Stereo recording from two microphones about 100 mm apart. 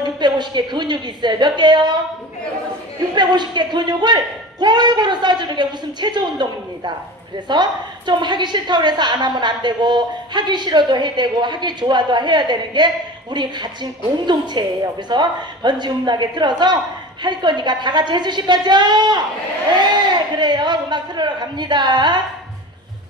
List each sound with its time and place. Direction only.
0.0 s a woman's voice: 50° right (ahead or behind)
3.2 s a woman's voice: 50° right (ahead or behind)
20.3 s a woman's voice: 50° right (ahead or behind)